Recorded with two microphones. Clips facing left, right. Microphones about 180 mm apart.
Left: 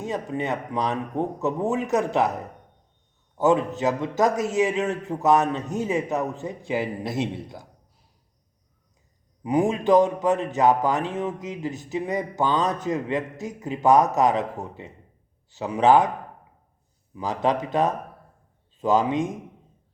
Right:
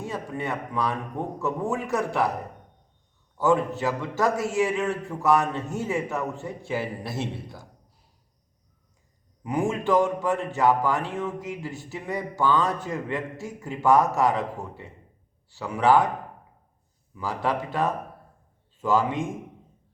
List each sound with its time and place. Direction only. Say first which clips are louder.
0.0 s speech: left 3 dB; 20° left (ahead or behind)
3.3 s speech: left 2 dB; 20° left (ahead or behind)
9.4 s speech: left 4 dB; 15° left (ahead or behind)
17.2 s speech: left 3 dB; 20° left (ahead or behind)